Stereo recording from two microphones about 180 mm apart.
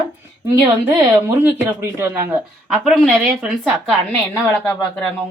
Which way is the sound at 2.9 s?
Centre (ahead or behind).